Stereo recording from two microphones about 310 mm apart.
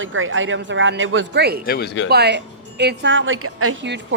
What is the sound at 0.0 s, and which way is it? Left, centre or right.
Speech, right.